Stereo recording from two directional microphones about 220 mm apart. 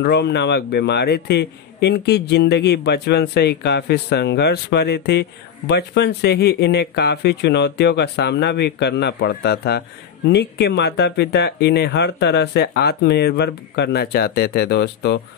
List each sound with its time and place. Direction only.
0.0 s speech: 50° left (ahead or behind)